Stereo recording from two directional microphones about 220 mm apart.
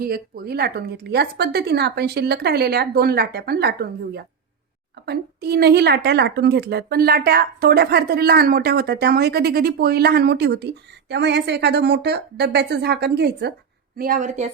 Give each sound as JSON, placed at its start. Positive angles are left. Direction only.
{"t": 0.0, "sound": "a woman's voice", "side_deg": -45}